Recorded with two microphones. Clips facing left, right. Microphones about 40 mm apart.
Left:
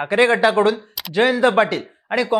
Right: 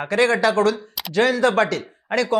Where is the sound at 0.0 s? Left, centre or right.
Left.